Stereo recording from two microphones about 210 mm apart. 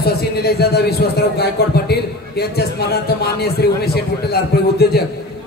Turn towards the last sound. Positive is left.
turn(degrees=50)  # may be behind; listen again after turning